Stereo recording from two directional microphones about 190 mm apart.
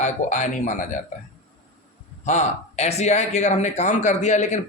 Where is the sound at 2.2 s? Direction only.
35° left (ahead or behind).